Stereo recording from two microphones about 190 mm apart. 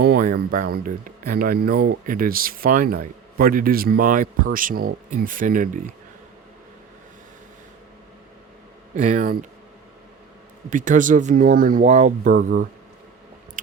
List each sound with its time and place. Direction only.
0.0 s speech: 55° right (ahead or behind)
9.0 s speech: 45° right (ahead or behind)
10.7 s speech: 45° right (ahead or behind)